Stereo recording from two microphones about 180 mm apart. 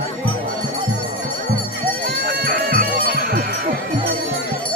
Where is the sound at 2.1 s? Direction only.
65° right (ahead or behind).